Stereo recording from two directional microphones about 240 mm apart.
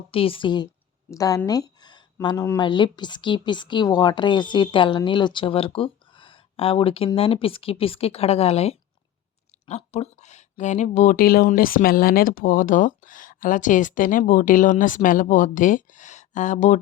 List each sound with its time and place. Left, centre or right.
0.1 s speech: left